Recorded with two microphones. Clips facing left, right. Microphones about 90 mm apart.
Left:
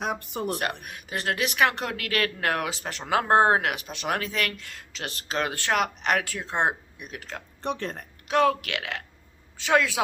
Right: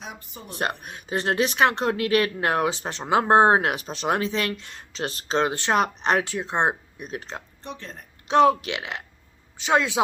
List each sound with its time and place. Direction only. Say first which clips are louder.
0.0 s speech: left 10 dB; 60° left (ahead or behind)
0.6 s speech: right 2 dB; 30° right (ahead or behind)
7.6 s speech: left 7 dB; 60° left (ahead or behind)
8.3 s speech: right 4 dB; 20° right (ahead or behind)